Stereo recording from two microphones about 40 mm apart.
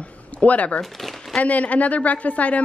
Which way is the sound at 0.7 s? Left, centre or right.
Centre.